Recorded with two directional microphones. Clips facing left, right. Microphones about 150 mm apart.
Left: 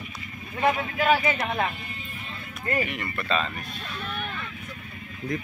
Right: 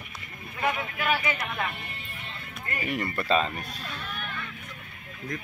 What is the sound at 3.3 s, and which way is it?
Speech, 10° right (ahead or behind).